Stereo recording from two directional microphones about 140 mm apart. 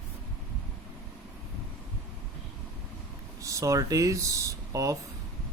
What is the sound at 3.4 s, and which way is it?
Speech, 25° right (ahead or behind).